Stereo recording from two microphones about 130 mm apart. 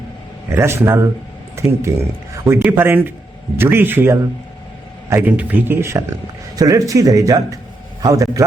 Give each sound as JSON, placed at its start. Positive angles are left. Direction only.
{"t": 0.5, "sound": "a man's voice", "side_deg": -20}